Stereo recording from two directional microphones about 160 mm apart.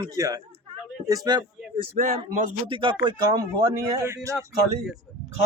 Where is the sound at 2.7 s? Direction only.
30° right (ahead or behind).